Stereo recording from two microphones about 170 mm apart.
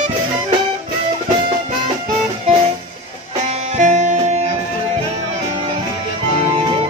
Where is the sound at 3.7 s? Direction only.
45° right (ahead or behind).